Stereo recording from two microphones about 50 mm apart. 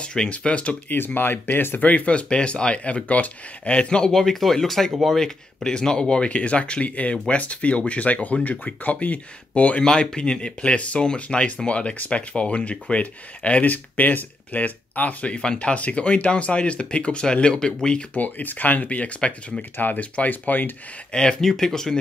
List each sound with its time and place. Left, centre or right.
0.0 s speech: centre
0.8 s speech: left
1.9 s speech: left
18.1 s speech: left
21.1 s speech: centre